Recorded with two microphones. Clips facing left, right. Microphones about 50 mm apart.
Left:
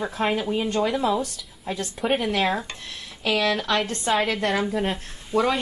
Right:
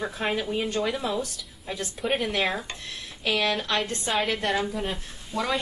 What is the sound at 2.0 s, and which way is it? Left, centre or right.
Speech, centre.